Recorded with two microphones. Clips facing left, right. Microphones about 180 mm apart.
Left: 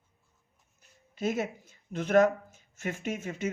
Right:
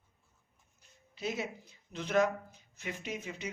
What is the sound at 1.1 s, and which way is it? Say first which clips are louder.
Speech: left 6 dB; 50° left (ahead or behind).